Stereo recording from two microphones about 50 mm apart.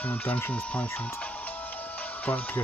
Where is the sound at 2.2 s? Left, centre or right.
Left.